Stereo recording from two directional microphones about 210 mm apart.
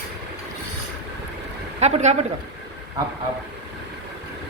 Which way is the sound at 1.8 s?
35° right (ahead or behind).